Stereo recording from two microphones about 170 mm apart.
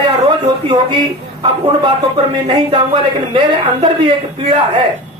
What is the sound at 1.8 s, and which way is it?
Speech, 30° right (ahead or behind).